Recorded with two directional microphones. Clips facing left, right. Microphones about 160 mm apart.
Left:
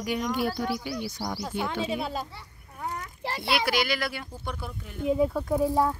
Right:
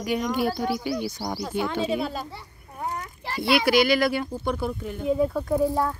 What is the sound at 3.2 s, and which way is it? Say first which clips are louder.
Speech: right 5 dB; 30° left (ahead or behind).